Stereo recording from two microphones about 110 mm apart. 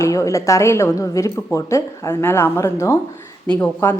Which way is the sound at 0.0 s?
25° left (ahead or behind).